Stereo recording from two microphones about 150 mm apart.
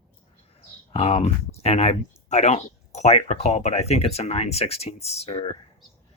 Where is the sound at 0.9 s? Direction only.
45° left (ahead or behind).